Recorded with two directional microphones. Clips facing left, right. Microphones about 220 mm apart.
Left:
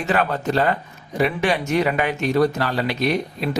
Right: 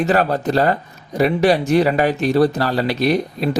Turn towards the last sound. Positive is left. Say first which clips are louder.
# right 4 dB
turn(degrees=-35)  # may be behind; listen again after turning